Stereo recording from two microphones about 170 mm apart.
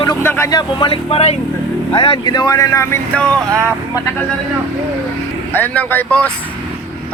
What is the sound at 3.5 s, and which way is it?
Speech, 15° right (ahead or behind).